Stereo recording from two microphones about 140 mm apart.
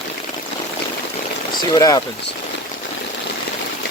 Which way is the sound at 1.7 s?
25° left (ahead or behind).